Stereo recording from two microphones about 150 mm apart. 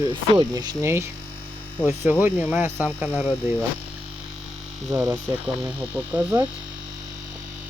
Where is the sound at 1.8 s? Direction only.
10° right (ahead or behind).